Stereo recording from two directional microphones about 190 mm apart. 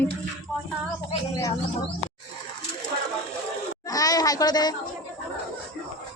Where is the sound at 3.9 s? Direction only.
20° left (ahead or behind).